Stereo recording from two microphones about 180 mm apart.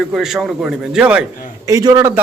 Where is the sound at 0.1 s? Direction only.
Centre (ahead or behind).